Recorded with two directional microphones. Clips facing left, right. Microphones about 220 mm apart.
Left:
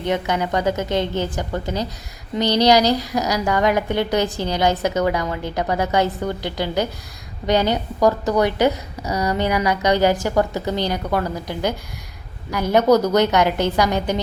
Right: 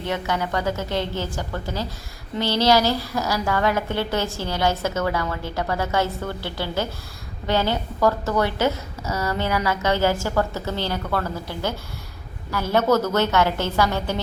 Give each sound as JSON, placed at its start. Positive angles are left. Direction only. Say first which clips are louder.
{"t": 0.0, "sound": "a woman's voice", "louder": "left 4 dB", "side_deg": 20}